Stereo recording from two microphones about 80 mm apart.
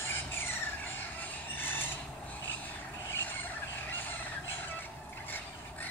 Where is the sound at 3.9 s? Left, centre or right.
Left.